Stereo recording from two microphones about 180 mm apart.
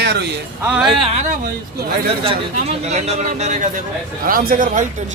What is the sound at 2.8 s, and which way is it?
A man's voice, 35° right (ahead or behind).